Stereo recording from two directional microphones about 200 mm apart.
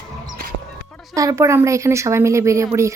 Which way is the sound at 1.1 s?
15° right (ahead or behind).